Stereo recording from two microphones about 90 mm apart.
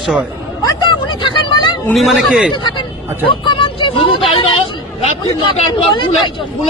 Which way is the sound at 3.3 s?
70° left (ahead or behind).